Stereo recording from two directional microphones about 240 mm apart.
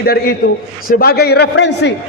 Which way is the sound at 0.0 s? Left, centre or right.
Left.